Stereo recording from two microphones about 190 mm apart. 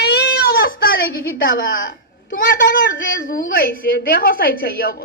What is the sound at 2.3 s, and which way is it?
A woman's voice, 45° left (ahead or behind).